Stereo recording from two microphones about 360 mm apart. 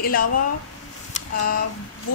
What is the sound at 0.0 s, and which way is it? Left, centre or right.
Speech, left.